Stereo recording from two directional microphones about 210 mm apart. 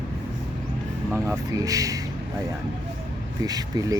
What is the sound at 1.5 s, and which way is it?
Speech, 15° right (ahead or behind).